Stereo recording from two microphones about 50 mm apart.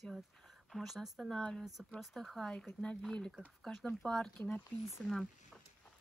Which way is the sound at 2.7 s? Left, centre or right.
Centre.